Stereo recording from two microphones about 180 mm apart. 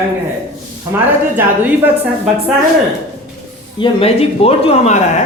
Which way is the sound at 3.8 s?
35° left (ahead or behind).